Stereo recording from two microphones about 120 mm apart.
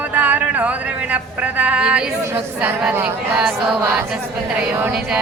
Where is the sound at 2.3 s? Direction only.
20° right (ahead or behind).